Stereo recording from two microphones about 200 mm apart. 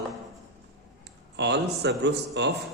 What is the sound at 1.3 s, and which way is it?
A man's voice, 55° right (ahead or behind).